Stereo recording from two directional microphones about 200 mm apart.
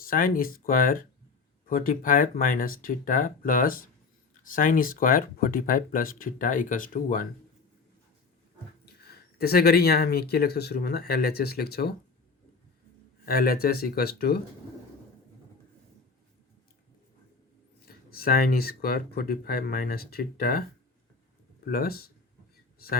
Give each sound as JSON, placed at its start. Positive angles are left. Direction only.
{"t": 0.0, "sound": "speech", "side_deg": 45}
{"t": 9.1, "sound": "speech", "side_deg": 50}
{"t": 13.2, "sound": "speech", "side_deg": 50}
{"t": 17.8, "sound": "speech", "side_deg": 50}